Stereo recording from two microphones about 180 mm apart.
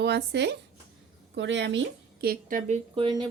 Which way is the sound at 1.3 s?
85° right.